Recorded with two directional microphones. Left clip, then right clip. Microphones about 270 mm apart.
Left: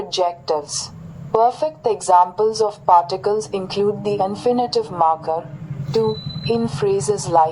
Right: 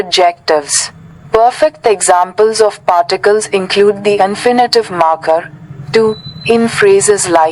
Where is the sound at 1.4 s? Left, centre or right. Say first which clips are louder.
Right 10 dB; right.